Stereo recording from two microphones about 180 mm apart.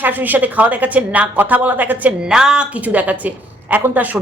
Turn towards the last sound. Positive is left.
turn(degrees=-10)  # may be behind; listen again after turning